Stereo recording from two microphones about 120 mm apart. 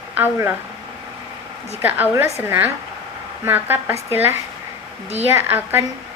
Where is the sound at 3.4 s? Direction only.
20° right (ahead or behind).